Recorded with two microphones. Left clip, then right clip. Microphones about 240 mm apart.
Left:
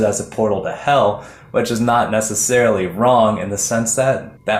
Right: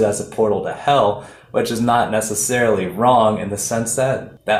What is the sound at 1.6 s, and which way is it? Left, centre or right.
Speech, left.